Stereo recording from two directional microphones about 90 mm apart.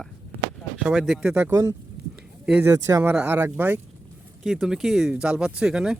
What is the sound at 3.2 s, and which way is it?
Speech, 25° right (ahead or behind).